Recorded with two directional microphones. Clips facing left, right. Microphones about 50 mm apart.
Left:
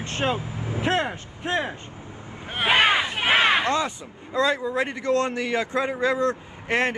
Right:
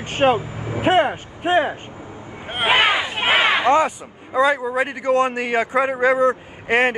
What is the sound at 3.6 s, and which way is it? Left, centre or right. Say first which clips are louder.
Speech: right 8 dB; right.